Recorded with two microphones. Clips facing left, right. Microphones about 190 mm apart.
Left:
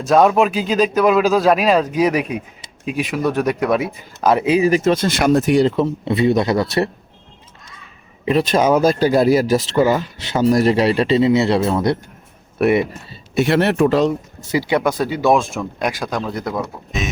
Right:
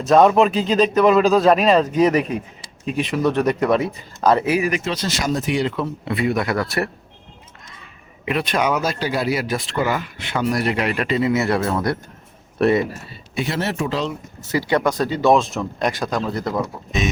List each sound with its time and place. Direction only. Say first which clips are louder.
0.0 s speech: even; centre (ahead or behind); by 4.7 s 20° left (ahead or behind)
4.7 s speech: left 8 dB; 45° left (ahead or behind); by 6.9 s 20° left (ahead or behind)
8.2 s speech: left 5 dB; 35° left (ahead or behind); by 12.8 s 10° left (ahead or behind)
13.4 s speech: left 8 dB; 65° left (ahead or behind)
14.4 s speech: left 1 dB; 15° left (ahead or behind)